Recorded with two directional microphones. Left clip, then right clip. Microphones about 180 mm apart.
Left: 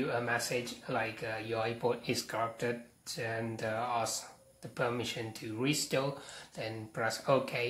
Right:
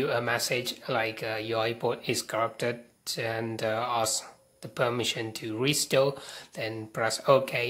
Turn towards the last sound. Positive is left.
turn(degrees=-40)  # may be behind; listen again after turning